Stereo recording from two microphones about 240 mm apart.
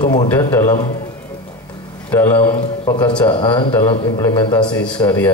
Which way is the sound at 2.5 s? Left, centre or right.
Centre.